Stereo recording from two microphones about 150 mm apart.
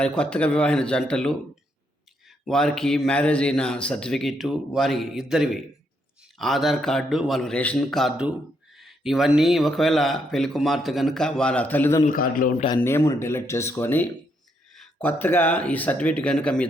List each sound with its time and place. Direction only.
0.0 s speech: 5° left (ahead or behind)
2.4 s speech: centre (ahead or behind)
12.0 s a man's voice: 70° left (ahead or behind)
12.8 s speech: 15° left (ahead or behind)